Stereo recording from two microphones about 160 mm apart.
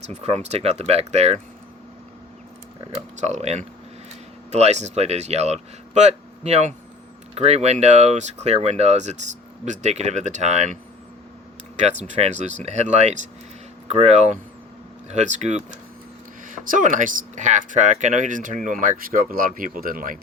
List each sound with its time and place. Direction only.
0.1 s speech: 40° right (ahead or behind)
3.2 s speech: 45° right (ahead or behind)
11.8 s speech: 45° right (ahead or behind)